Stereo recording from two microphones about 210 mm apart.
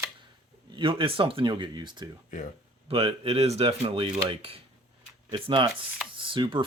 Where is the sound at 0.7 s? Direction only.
25° right (ahead or behind).